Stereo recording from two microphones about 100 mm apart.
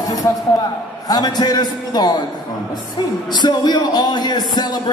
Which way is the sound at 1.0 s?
45° left (ahead or behind).